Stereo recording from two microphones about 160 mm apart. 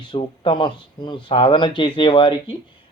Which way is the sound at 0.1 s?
30° left (ahead or behind).